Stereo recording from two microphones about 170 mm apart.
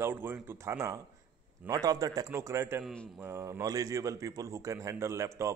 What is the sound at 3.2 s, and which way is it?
A man's voice, 15° right (ahead or behind).